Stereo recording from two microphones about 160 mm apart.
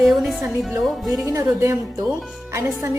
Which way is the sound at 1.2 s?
20° right (ahead or behind).